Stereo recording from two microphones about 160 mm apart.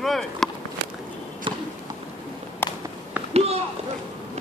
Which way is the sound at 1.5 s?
35° right (ahead or behind).